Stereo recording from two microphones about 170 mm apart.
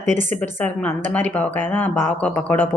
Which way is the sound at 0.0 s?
45° right (ahead or behind).